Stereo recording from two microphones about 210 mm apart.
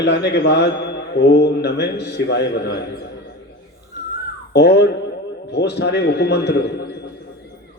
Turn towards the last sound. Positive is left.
turn(degrees=50)  # may be behind; listen again after turning